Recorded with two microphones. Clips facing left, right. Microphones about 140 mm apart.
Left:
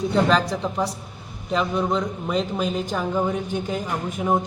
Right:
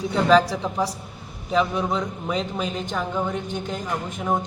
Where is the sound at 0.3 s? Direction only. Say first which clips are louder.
Right 3 dB; centre (ahead or behind).